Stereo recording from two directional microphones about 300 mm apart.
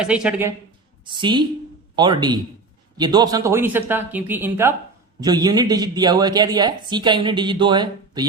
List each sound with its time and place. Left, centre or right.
0.0 s speech: centre
1.0 s speech: centre